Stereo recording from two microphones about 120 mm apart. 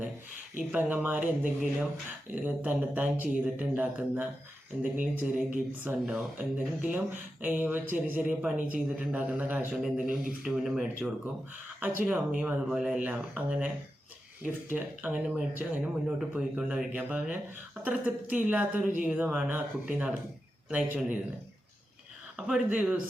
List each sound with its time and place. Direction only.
0.7 s speech: 15° right (ahead or behind)
6.0 s speech: centre (ahead or behind)
6.3 s speech: 10° right (ahead or behind)
22.4 s speech: 5° right (ahead or behind)